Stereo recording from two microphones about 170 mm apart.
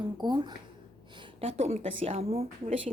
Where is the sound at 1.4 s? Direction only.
35° right (ahead or behind).